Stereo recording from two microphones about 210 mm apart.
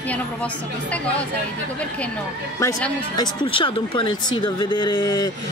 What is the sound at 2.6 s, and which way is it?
Speech, 15° left (ahead or behind).